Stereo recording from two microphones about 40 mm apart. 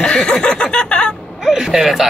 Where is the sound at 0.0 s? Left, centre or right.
Left.